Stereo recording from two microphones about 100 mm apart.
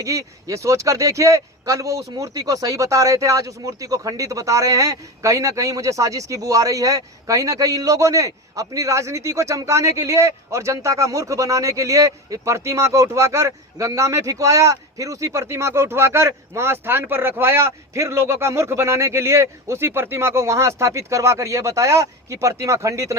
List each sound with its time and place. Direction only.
0.0 s speech: 35° right (ahead or behind)